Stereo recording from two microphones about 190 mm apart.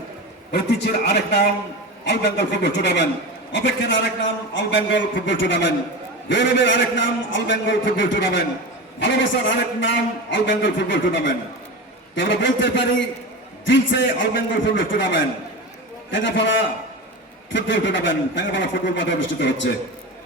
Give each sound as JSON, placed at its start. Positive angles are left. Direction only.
{"t": 0.5, "sound": "a man's voice", "side_deg": 60}
{"t": 17.5, "sound": "a man's voice", "side_deg": 75}